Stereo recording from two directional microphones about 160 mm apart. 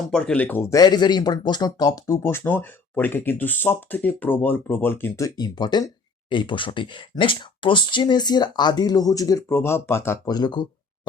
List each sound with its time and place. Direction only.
0.1 s speech: 5° left (ahead or behind); by 11.1 s 30° left (ahead or behind)